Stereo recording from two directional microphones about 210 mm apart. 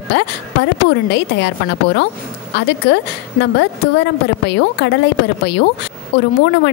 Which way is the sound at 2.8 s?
55° left (ahead or behind).